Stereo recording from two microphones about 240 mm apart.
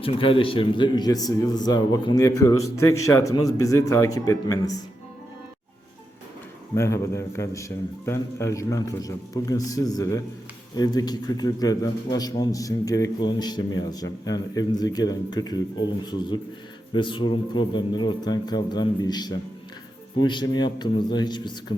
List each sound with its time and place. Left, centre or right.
0.0 s a man's voice: left
6.7 s a man's voice: centre